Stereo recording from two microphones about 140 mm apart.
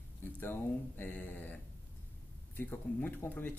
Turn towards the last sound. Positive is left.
turn(degrees=15)  # may be behind; listen again after turning